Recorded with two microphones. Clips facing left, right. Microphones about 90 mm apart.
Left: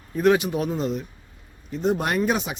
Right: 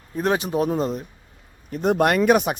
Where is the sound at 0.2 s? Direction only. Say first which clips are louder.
Left 2 dB; 35° right (ahead or behind).